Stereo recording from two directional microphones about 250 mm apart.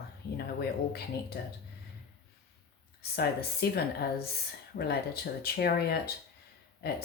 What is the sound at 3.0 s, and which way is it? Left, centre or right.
Speech, left.